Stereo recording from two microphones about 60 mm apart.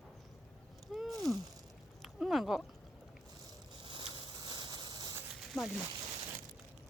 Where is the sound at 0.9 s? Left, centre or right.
Centre.